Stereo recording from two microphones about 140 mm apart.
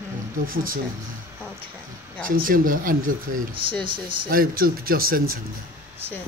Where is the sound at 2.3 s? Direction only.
80° right.